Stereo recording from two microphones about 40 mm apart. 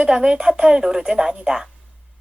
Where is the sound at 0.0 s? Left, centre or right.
Right.